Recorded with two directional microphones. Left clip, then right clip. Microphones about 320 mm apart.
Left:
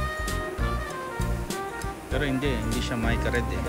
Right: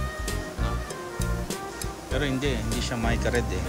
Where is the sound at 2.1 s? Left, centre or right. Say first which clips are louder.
Even; centre.